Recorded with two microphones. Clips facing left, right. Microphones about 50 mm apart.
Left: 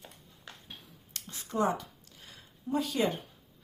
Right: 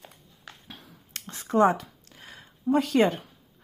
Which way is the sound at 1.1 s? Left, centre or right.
Right.